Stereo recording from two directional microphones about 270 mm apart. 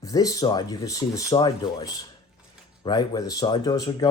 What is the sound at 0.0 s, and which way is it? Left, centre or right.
Speech, centre.